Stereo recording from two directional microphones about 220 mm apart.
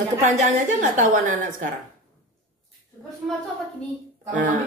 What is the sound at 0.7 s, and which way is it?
Speech, 35° right (ahead or behind).